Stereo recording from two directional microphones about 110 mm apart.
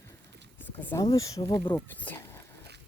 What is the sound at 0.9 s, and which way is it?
Speech, 30° left (ahead or behind).